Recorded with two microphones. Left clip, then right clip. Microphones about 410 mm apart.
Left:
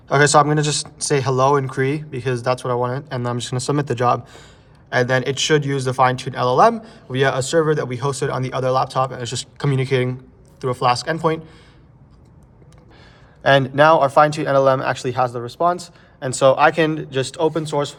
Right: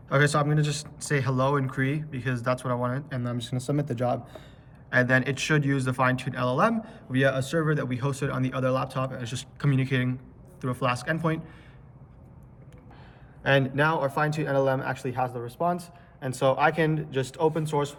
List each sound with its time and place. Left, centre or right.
0.1 s speech: centre
13.4 s a man's voice: centre